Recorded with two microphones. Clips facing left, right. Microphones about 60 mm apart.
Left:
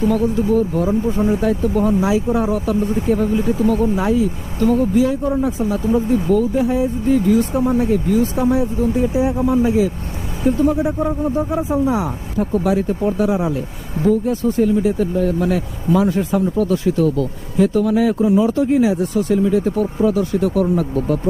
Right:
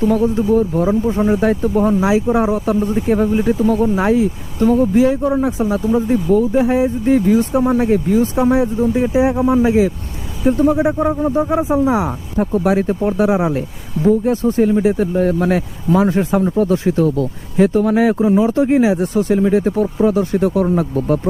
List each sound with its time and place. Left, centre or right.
0.0 s speech: right
7.0 s speech: right
7.3 s speech: right
7.7 s speech: right
9.6 s speech: right
10.8 s speech: right
13.5 s speech: right